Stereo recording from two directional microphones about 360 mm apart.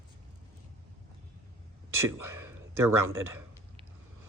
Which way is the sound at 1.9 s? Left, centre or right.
Right.